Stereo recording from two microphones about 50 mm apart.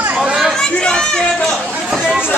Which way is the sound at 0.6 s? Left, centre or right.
Centre.